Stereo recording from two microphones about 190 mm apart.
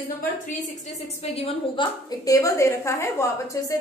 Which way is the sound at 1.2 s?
30° left (ahead or behind).